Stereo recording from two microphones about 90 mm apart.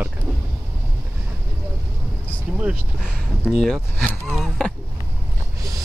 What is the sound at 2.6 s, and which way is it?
Speech, 10° right (ahead or behind).